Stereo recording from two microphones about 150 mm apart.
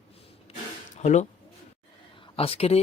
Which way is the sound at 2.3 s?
40° left (ahead or behind).